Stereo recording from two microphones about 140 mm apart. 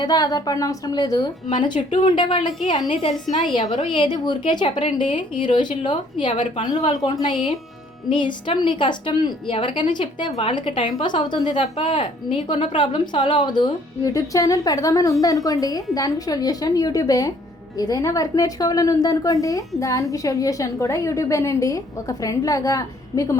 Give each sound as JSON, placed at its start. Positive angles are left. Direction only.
{"t": 0.0, "sound": "a woman's voice", "side_deg": 25}
{"t": 3.8, "sound": "a woman's voice", "side_deg": 35}